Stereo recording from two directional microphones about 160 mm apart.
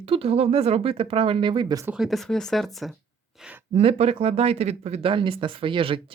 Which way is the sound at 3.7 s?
40° right (ahead or behind).